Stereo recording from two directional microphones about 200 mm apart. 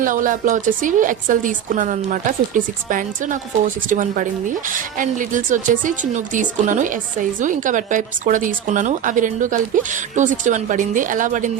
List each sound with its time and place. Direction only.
0.0 s a woman's voice: 40° right (ahead or behind)